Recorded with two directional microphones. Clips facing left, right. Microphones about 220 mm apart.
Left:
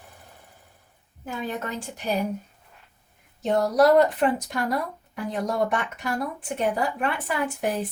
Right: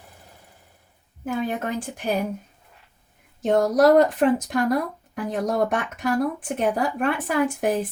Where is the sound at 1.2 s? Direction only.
50° right (ahead or behind).